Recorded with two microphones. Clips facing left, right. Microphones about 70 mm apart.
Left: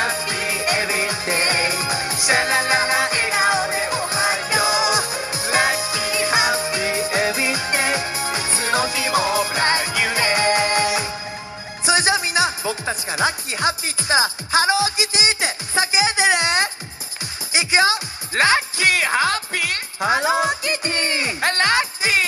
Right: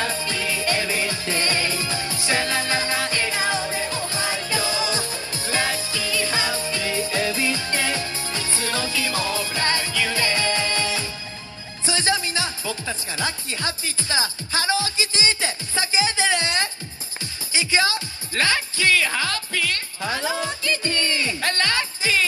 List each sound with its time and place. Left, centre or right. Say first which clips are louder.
0.0 s music: left 3 dB; left
13.1 s speech: left 7 dB; left
17.5 s music: left 4 dB; centre
20.1 s speech: left 7 dB; left